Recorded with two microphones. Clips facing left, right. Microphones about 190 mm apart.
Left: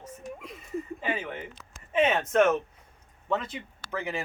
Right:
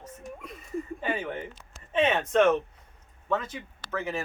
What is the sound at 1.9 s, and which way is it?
Speech, 5° left (ahead or behind).